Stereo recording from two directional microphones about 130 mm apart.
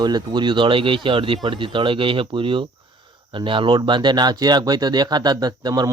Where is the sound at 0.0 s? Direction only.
35° right (ahead or behind).